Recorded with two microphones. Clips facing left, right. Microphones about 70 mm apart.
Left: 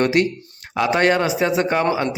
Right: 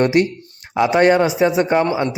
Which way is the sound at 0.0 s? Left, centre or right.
Right.